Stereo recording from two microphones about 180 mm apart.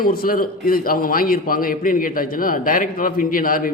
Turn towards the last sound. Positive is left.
turn(degrees=50)  # may be behind; listen again after turning